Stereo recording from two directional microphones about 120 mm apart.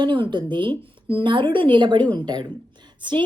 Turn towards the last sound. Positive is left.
turn(degrees=-40)  # may be behind; listen again after turning